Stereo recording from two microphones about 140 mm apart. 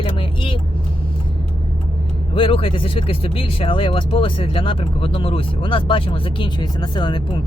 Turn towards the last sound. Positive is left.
turn(degrees=35)  # may be behind; listen again after turning